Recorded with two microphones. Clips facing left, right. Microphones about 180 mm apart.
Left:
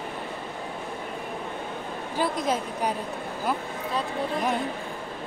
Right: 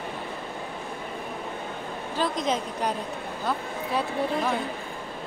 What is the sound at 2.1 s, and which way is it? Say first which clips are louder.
Speech: even; 5° left (ahead or behind).